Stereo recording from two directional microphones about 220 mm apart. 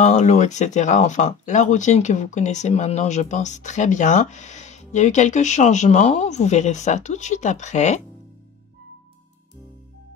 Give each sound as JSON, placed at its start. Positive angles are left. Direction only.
{"t": 0.0, "sound": "speech", "side_deg": 30}